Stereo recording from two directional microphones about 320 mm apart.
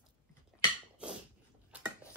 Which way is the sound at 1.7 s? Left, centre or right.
Centre.